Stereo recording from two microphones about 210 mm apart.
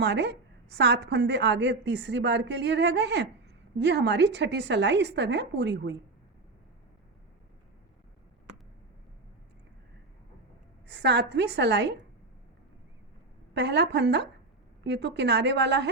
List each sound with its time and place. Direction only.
0.0 s a woman's voice: 55° right (ahead or behind)
10.8 s a woman's voice: 55° right (ahead or behind)
13.5 s a woman's voice: 55° right (ahead or behind)